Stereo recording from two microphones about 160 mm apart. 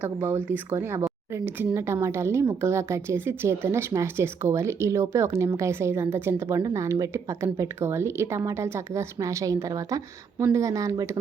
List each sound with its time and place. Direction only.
0.0 s speech: 15° right (ahead or behind)